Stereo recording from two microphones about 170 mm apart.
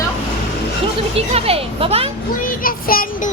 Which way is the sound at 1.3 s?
35° right (ahead or behind).